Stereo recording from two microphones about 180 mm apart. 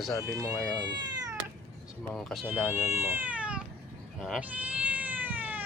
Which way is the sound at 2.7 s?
15° right (ahead or behind).